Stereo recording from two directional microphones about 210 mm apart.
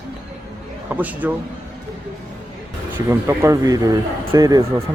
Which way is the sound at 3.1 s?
10° right (ahead or behind).